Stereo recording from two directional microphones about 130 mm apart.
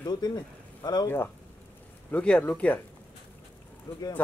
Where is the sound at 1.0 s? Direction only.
15° left (ahead or behind).